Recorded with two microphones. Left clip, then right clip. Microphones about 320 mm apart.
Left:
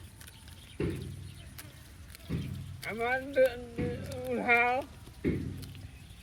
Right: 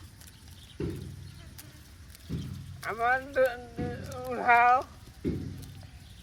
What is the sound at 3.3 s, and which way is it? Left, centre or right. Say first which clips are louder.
Speech: even; right.